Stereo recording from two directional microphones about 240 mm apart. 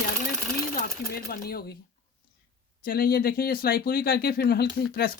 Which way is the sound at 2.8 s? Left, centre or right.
Left.